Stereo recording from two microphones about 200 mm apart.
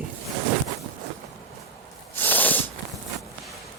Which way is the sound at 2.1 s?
10° left (ahead or behind).